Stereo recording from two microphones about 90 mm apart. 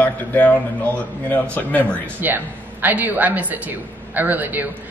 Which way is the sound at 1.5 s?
20° left (ahead or behind).